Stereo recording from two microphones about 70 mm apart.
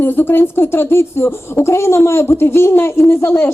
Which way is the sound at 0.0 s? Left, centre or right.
Left.